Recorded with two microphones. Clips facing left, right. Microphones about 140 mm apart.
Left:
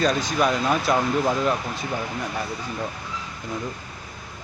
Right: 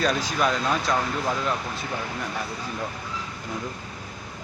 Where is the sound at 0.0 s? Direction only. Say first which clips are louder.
Left 2 dB; 5° right (ahead or behind).